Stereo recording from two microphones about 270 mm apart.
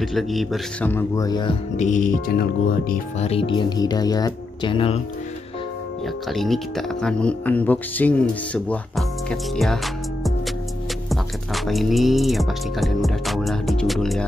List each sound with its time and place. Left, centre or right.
0.0 s speech: centre
6.2 s speech: centre
11.1 s speech: centre